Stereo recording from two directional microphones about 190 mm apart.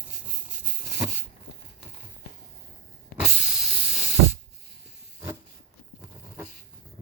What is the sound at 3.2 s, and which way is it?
Hiss, centre (ahead or behind).